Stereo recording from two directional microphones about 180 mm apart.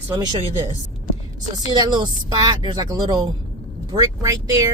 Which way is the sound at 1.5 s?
25° right (ahead or behind).